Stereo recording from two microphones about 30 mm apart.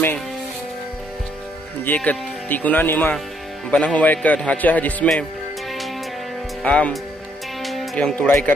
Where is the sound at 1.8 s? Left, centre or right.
Left.